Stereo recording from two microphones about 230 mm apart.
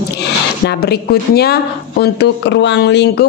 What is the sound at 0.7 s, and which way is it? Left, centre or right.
A woman's voice, left.